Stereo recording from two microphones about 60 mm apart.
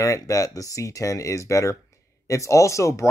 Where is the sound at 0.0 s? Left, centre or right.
Left.